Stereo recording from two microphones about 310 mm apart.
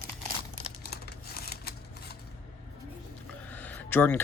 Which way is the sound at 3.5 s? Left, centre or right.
Centre.